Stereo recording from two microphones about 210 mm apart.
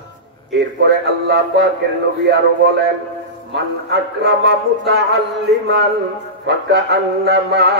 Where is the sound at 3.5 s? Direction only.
55° right (ahead or behind).